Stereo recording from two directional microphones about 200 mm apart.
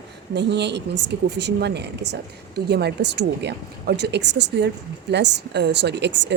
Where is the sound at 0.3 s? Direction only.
60° right (ahead or behind).